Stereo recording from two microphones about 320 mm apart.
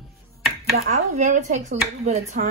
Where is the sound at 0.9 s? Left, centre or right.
Right.